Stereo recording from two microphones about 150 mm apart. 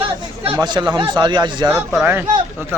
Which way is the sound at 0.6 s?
30° right (ahead or behind).